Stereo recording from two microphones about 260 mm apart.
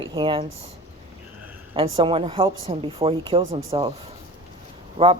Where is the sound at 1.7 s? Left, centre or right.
Right.